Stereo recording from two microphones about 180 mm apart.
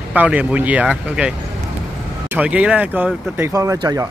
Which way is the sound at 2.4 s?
5° right (ahead or behind).